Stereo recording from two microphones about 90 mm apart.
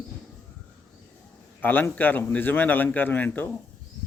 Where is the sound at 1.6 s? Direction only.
20° left (ahead or behind).